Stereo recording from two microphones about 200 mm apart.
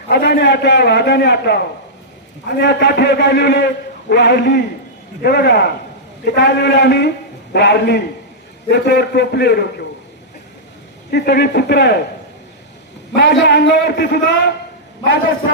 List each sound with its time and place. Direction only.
0.1 s a man's voice: 55° left (ahead or behind)
11.1 s a man's voice: 55° left (ahead or behind)
13.1 s a man's voice: 60° left (ahead or behind)